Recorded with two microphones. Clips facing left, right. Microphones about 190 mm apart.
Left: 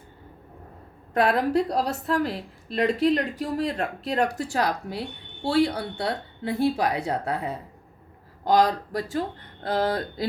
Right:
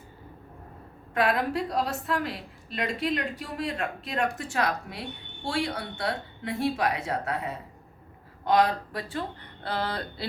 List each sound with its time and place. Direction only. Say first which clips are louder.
1.1 s a woman's voice: left 4 dB; 35° left (ahead or behind)
8.4 s a woman's voice: left 2 dB; 40° left (ahead or behind)